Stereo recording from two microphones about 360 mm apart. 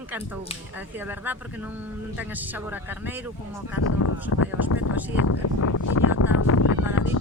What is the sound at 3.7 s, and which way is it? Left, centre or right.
Speech, left.